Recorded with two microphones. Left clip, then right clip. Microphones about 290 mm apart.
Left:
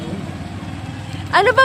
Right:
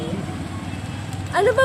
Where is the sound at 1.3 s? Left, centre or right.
Left.